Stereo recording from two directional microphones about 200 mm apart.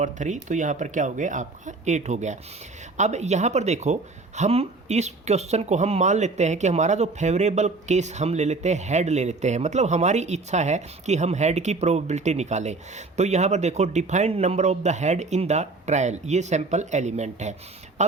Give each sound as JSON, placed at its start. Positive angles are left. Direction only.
{"t": 0.0, "sound": "speech", "side_deg": -40}